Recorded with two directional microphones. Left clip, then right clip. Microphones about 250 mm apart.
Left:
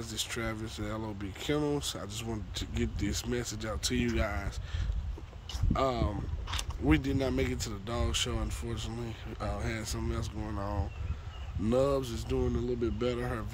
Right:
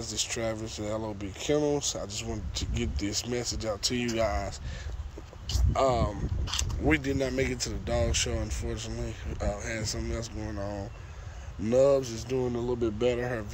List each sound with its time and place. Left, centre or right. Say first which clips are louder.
0.0 s speech: right 4 dB; centre
5.7 s speech: right 5 dB; centre
6.5 s speech: right 5 dB; right
6.9 s speech: right 2 dB; centre